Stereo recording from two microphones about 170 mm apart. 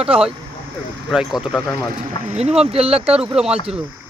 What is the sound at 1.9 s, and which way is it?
Speech, 45° right (ahead or behind).